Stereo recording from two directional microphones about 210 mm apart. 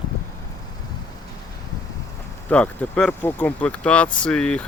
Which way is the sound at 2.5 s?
5° left (ahead or behind).